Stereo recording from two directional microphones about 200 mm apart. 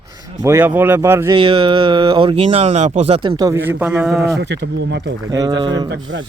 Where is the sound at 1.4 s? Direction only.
25° right (ahead or behind); by 4.2 s 5° right (ahead or behind).